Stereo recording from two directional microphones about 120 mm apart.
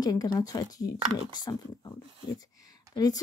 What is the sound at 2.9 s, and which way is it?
Speech, 35° left (ahead or behind).